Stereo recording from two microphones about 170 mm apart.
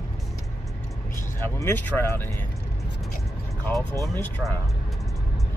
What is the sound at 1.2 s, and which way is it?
Speech, 15° left (ahead or behind).